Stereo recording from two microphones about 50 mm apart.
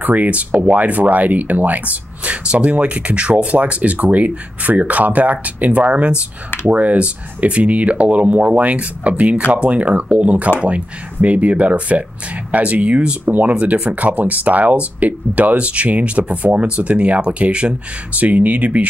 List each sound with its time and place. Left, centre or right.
0.0 s speech: right